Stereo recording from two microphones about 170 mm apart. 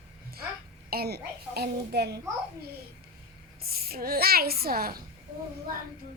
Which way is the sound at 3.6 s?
65° right (ahead or behind).